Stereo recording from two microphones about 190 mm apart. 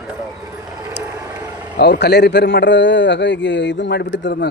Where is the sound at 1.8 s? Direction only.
60° left (ahead or behind).